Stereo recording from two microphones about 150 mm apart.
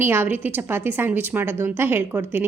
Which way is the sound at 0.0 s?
15° right (ahead or behind).